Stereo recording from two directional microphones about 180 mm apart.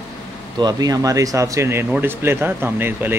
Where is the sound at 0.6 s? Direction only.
20° right (ahead or behind).